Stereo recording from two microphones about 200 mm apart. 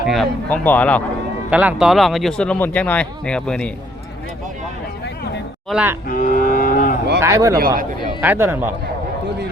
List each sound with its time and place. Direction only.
0.1 s a man's voice: 5° left (ahead or behind)
1.5 s speech: 5° right (ahead or behind)
5.6 s a man's voice: 5° right (ahead or behind)
6.1 s cattle: 40° left (ahead or behind)
7.2 s a man's voice: 15° right (ahead or behind)